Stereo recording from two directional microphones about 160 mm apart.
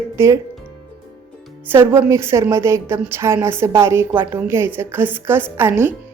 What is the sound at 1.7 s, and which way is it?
A woman's voice, 15° right (ahead or behind).